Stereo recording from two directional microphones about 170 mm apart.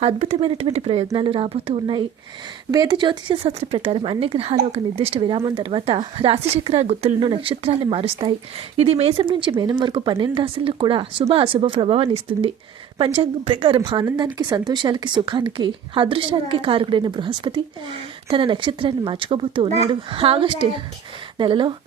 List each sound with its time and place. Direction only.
0.0 s a woman's voice: 40° right (ahead or behind)